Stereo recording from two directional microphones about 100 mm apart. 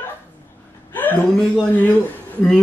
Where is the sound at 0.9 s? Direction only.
20° left (ahead or behind).